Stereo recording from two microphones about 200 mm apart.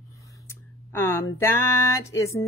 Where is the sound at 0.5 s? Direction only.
15° left (ahead or behind).